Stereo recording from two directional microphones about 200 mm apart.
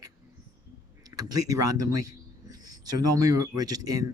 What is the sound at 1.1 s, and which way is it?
Speech, 20° right (ahead or behind).